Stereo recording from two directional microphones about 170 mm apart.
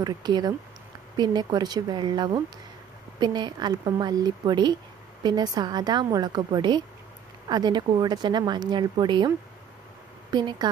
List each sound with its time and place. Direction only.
0.0 s speech: 25° right (ahead or behind)
10.3 s speech: 25° right (ahead or behind)